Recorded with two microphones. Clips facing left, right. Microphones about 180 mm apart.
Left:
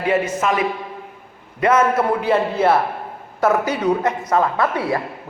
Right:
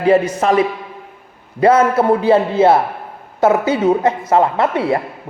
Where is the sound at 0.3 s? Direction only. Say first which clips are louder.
Right 6 dB; 35° right (ahead or behind).